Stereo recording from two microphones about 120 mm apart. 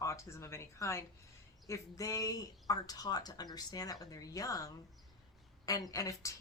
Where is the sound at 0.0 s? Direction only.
25° left (ahead or behind).